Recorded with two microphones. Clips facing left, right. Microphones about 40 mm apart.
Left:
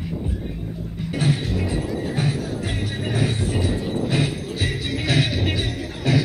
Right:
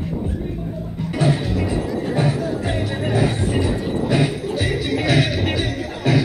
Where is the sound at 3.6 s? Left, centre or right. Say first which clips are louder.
Right 3 dB; centre.